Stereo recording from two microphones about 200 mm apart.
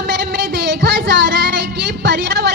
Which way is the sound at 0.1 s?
60° right (ahead or behind).